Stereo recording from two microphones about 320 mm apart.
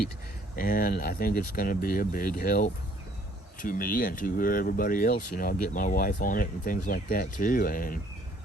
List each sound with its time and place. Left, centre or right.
0.5 s speech: left